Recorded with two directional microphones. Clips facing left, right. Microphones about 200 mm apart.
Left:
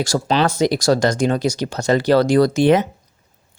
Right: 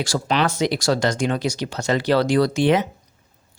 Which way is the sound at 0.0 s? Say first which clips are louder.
Left 3 dB; 35° left (ahead or behind).